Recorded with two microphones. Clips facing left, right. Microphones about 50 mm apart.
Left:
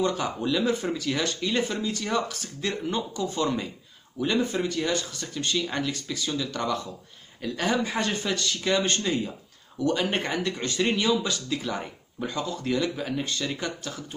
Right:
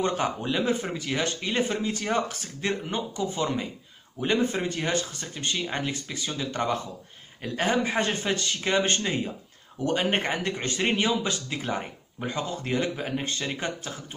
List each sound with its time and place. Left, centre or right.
0.4 s speech: right
2.9 s speech: right
4.2 s speech: right